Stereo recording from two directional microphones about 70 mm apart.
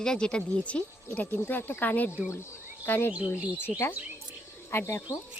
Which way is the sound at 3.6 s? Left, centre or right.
Left.